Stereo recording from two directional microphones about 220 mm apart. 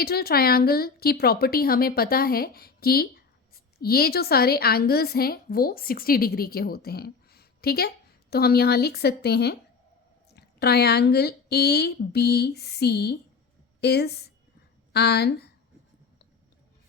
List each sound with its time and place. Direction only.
0.0 s a woman's voice: 45° left (ahead or behind)